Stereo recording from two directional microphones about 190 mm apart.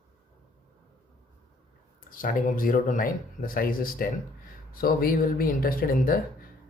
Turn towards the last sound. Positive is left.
turn(degrees=50)  # may be behind; listen again after turning